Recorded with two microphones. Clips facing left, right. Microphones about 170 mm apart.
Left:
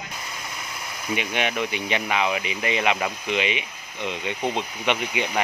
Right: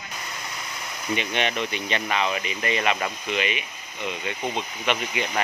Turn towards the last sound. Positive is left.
turn(degrees=10)  # may be behind; listen again after turning